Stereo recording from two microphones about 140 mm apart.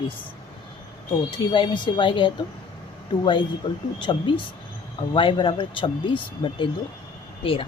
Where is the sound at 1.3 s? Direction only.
35° left (ahead or behind).